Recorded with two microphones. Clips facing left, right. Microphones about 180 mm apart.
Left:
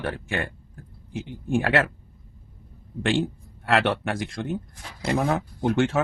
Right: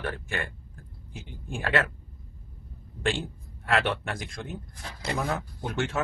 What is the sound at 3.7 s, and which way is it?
Speech, 65° left (ahead or behind).